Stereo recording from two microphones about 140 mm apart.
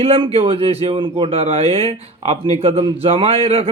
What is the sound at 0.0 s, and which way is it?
Speech, 40° right (ahead or behind).